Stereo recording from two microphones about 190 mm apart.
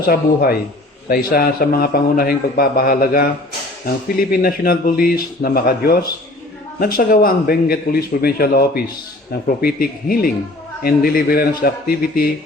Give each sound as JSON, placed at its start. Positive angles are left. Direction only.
{"t": 0.0, "sound": "a man's voice", "side_deg": 55}